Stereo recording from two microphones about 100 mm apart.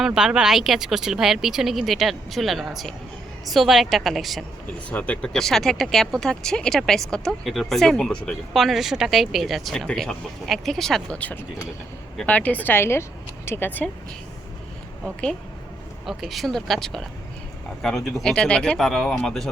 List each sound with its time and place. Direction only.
0.0 s speech: 5° right (ahead or behind)
4.9 s speech: 15° left (ahead or behind)
11.2 s speech: 15° left (ahead or behind)
16.0 s speech: centre (ahead or behind)